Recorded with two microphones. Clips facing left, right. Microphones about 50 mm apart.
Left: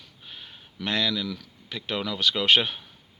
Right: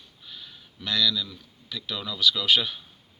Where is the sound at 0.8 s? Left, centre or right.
Left.